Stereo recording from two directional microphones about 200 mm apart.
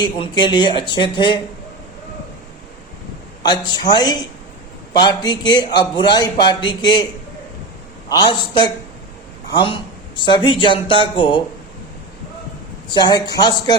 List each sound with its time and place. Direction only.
0.0 s speech: 20° left (ahead or behind)
3.4 s speech: 20° left (ahead or behind)
8.1 s speech: 20° left (ahead or behind)
12.9 s speech: 20° left (ahead or behind)